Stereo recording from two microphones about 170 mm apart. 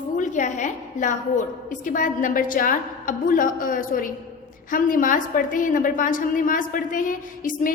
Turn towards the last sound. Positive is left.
turn(degrees=50)  # may be behind; listen again after turning